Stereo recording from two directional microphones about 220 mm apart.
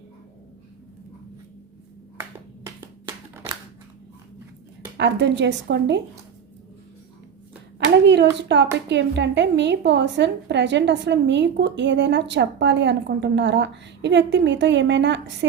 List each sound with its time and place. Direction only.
4.9 s a woman's voice: 50° right (ahead or behind)
8.0 s a woman's voice: 50° right (ahead or behind)